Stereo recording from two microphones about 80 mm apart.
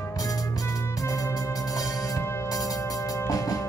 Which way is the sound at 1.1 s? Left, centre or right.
Left.